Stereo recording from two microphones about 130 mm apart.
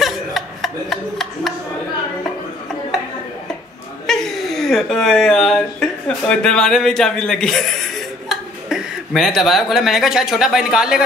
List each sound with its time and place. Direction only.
0.0 s chuckle: centre (ahead or behind)
4.1 s speech: centre (ahead or behind)